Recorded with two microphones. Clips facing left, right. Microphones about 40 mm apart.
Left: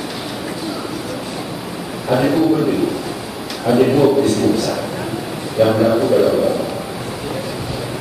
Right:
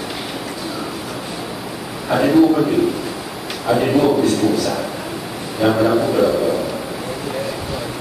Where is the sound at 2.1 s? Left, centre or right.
Centre.